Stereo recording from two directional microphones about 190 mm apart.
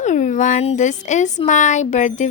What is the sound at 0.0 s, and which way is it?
A woman's voice, 40° left (ahead or behind).